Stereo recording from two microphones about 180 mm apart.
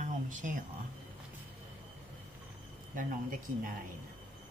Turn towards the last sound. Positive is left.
turn(degrees=-50)  # may be behind; listen again after turning